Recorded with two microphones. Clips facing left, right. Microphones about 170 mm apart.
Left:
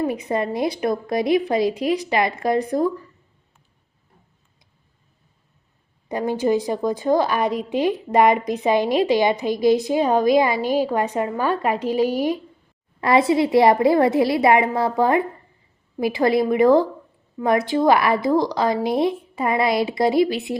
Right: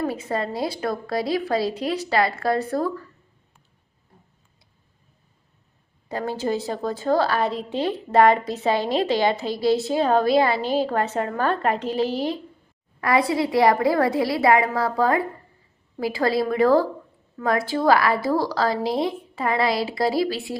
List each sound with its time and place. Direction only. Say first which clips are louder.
0.0 s a woman's voice: left 3 dB; 15° left (ahead or behind)
6.1 s a woman's voice: left 5 dB; 15° left (ahead or behind)
13.0 s a woman's voice: left 4 dB; 25° left (ahead or behind)